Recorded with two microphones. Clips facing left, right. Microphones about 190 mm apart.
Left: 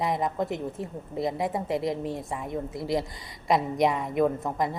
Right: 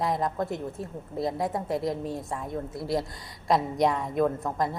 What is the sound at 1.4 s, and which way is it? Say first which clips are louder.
Speech: left 1 dB; centre (ahead or behind).